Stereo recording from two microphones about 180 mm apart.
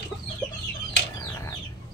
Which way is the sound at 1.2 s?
15° left (ahead or behind).